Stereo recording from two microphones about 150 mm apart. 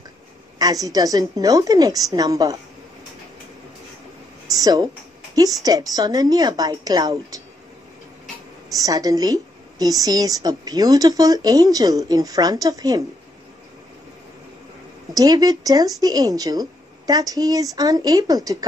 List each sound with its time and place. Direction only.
0.6 s a woman's voice: 25° right (ahead or behind)
4.5 s a sound: 25° right (ahead or behind)
5.6 s a woman's voice: 25° right (ahead or behind)
8.6 s a woman's voice: 25° right (ahead or behind)
15.1 s a woman's voice: 25° right (ahead or behind)